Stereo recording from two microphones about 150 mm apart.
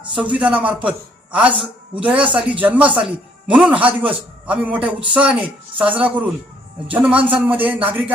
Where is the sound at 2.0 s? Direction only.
10° right (ahead or behind).